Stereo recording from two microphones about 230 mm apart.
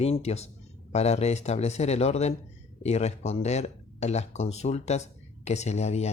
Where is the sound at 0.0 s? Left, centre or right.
Left.